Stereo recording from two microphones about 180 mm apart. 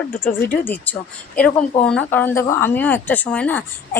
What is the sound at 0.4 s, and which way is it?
Speech, 10° left (ahead or behind).